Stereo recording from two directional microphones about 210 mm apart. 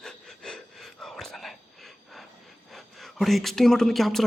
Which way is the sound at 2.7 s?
Centre (ahead or behind).